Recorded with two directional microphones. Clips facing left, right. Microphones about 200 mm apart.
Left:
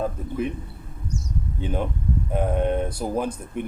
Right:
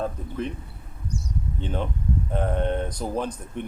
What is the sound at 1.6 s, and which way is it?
Speech, 10° left (ahead or behind).